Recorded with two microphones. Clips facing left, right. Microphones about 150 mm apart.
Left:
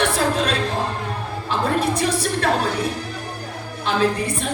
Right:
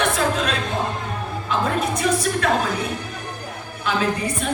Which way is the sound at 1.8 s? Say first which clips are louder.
Left 1 dB; 35° left (ahead or behind).